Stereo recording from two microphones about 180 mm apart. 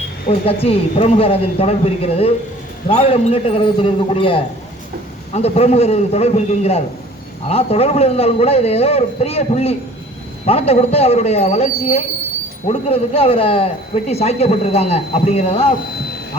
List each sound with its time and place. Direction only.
0.4 s a man's voice: 35° left (ahead or behind)